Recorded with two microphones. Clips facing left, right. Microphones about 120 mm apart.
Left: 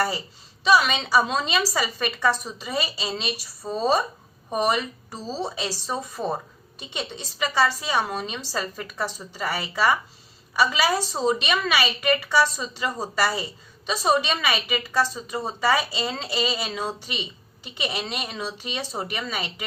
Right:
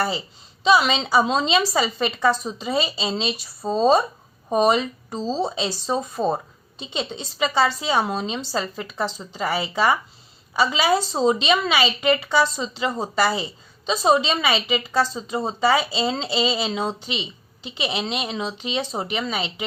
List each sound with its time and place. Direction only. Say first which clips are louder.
0.0 s a woman's voice: right 1 dB; 20° right (ahead or behind)
8.7 s a woman's voice: right 3 dB; 15° right (ahead or behind)